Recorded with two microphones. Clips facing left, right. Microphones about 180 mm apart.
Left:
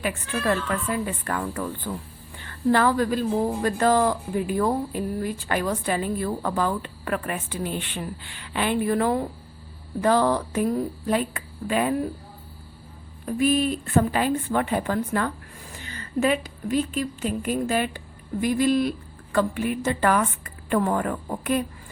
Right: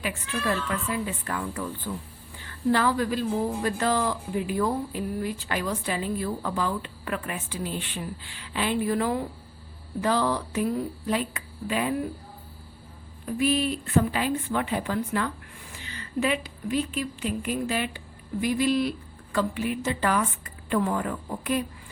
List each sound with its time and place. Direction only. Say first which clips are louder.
0.0 s speech: left 3 dB; 50° left (ahead or behind)
2.7 s speech: left 4 dB; 50° left (ahead or behind)
13.2 s a woman's voice: left 3 dB; 45° left (ahead or behind)